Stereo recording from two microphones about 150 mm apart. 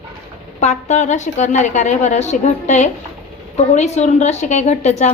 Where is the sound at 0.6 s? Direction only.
50° left (ahead or behind).